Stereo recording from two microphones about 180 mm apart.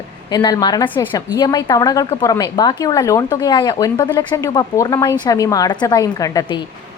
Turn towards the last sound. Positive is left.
turn(degrees=20)  # may be behind; listen again after turning